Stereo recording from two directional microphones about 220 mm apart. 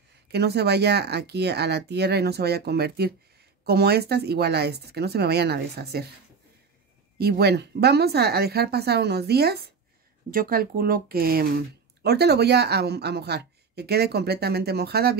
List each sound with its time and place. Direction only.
0.3 s speech: 50° right (ahead or behind)
7.2 s speech: 45° right (ahead or behind)